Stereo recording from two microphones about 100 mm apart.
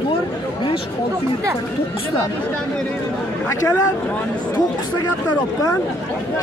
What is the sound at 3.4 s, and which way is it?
Speech, 30° left (ahead or behind).